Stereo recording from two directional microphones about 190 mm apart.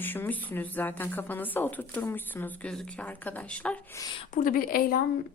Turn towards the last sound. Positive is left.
turn(degrees=50)  # may be behind; listen again after turning